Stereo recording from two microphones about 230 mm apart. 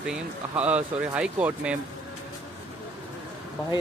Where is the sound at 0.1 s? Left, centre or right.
Centre.